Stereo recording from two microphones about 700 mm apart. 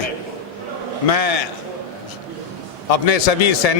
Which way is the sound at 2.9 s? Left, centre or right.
Left.